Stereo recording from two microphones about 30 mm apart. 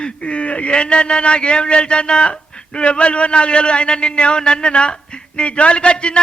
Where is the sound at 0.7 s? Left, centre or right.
Left.